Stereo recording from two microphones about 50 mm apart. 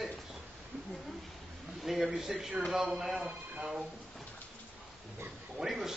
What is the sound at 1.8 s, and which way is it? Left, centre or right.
Speech, centre.